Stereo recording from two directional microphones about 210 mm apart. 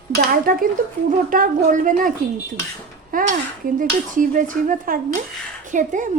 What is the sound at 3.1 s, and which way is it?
Speech, 40° right (ahead or behind).